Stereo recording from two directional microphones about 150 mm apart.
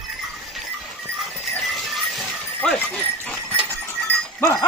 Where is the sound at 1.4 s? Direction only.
Centre (ahead or behind).